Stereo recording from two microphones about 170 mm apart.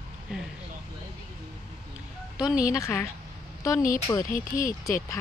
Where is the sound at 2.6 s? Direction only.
20° left (ahead or behind).